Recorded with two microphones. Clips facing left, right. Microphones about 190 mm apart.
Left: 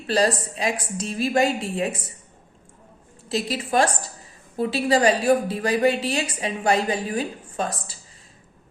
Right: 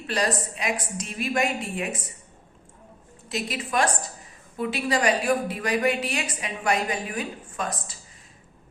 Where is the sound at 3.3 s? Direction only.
30° left (ahead or behind).